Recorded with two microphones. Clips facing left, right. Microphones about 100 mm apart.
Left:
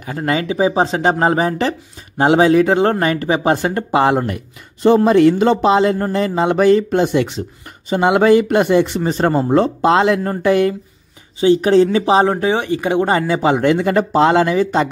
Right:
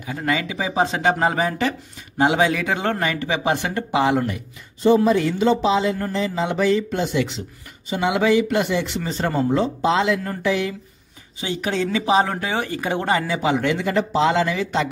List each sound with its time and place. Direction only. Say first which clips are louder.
0.0 s speech: left 4 dB; 40° left (ahead or behind)
4.8 s a man's voice: left 6 dB; 65° left (ahead or behind)
11.4 s speech: left 12 dB; 35° left (ahead or behind); by 13.0 s 20° left (ahead or behind)
13.0 s speech: left 3 dB; 35° left (ahead or behind)